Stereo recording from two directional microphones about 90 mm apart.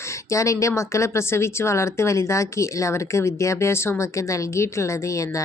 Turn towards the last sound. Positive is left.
turn(degrees=35)  # may be behind; listen again after turning